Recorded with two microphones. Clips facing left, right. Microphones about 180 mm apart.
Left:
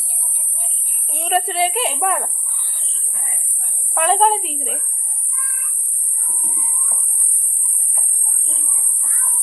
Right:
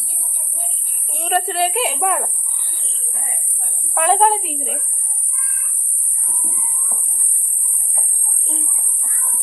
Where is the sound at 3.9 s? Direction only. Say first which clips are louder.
Right 1 dB; centre (ahead or behind).